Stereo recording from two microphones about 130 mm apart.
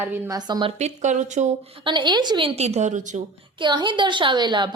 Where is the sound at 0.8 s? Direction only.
65° right (ahead or behind).